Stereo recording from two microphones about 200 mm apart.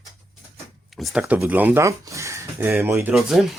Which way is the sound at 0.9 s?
Centre (ahead or behind).